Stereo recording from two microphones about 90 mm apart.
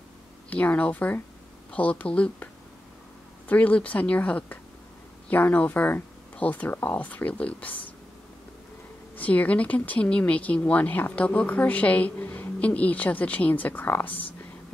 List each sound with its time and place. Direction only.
0.5 s speech: 15° left (ahead or behind)
9.1 s speech: 15° left (ahead or behind)